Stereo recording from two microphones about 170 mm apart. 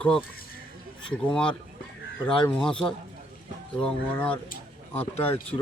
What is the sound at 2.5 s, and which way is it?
Speech, 5° left (ahead or behind).